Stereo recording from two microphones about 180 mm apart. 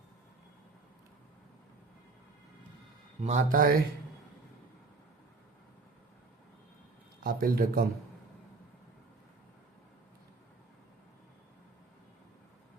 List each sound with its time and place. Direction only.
3.2 s a man's voice: 40° right (ahead or behind)
7.2 s a man's voice: 50° right (ahead or behind)